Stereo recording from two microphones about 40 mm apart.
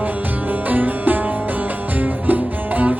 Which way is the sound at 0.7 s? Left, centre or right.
Right.